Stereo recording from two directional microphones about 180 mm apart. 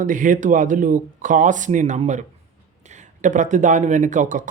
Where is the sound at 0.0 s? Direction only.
45° right (ahead or behind).